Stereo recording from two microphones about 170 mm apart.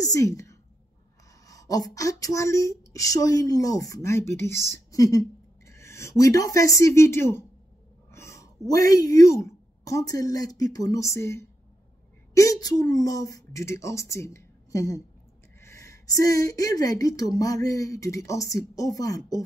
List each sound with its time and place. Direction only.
0.0 s a woman's voice: 20° left (ahead or behind)